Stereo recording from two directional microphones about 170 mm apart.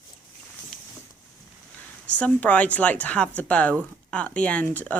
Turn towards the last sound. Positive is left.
turn(degrees=10)  # may be behind; listen again after turning